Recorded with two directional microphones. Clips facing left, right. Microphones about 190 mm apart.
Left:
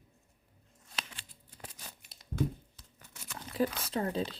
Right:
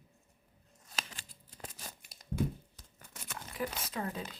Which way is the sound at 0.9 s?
45° right (ahead or behind).